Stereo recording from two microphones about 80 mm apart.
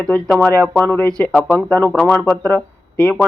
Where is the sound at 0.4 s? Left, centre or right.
Left.